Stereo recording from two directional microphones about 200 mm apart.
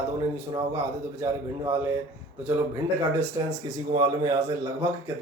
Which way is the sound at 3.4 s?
20° right (ahead or behind).